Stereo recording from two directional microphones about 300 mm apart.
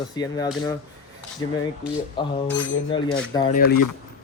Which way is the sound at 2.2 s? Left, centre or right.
Centre.